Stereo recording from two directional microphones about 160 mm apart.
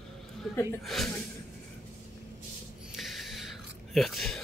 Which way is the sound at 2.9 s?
Centre (ahead or behind).